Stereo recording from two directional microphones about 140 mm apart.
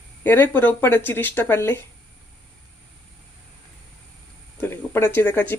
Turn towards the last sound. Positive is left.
turn(degrees=10)  # may be behind; listen again after turning